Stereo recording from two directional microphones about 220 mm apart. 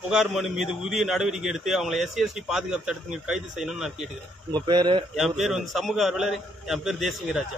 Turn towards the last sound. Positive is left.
turn(degrees=0)  # may be behind; listen again after turning